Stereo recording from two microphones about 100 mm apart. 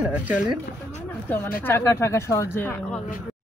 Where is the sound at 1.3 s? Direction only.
20° left (ahead or behind).